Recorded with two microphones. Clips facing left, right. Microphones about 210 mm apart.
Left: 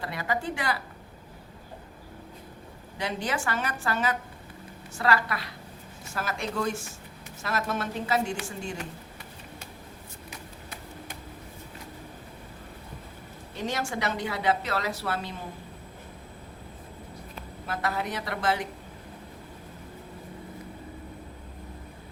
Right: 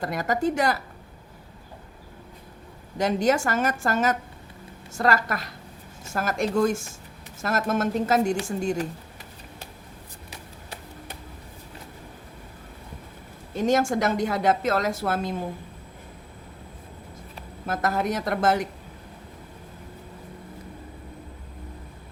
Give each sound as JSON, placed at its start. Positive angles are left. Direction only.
{"t": 0.0, "sound": "a woman's voice", "side_deg": -45}
{"t": 3.0, "sound": "a woman's voice", "side_deg": -45}
{"t": 13.6, "sound": "a woman's voice", "side_deg": -45}
{"t": 17.7, "sound": "a woman's voice", "side_deg": -45}